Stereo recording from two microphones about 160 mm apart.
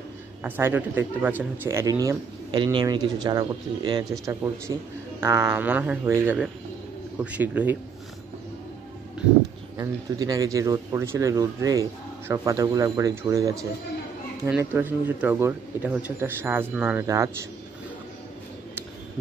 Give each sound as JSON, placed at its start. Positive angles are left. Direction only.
{"t": 0.4, "sound": "speech", "side_deg": -15}
{"t": 9.8, "sound": "speech", "side_deg": -25}